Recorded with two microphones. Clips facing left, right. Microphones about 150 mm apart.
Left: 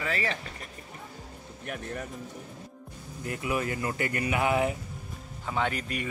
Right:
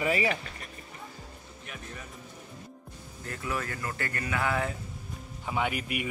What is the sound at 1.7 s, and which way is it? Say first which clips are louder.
Speech: left 8 dB; 60° left (ahead or behind).